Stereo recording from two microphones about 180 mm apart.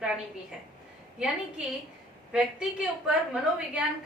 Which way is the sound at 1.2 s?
5° right (ahead or behind).